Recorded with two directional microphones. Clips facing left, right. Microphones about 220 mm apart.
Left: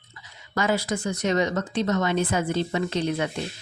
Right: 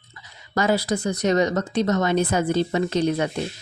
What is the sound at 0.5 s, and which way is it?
Speech, 40° right (ahead or behind).